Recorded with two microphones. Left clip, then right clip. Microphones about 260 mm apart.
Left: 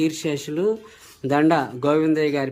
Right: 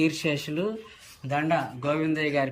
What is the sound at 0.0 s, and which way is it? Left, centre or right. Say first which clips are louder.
Speech: left 2 dB; centre.